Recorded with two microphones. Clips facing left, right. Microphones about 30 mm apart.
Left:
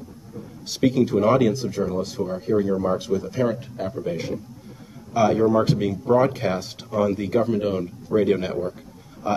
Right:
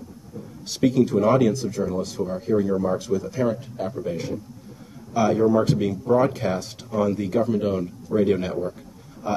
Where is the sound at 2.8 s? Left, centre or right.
Centre.